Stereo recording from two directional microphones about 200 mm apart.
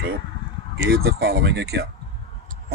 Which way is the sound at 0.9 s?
50° right (ahead or behind).